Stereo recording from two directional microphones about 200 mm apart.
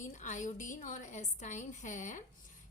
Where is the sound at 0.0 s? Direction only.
40° left (ahead or behind).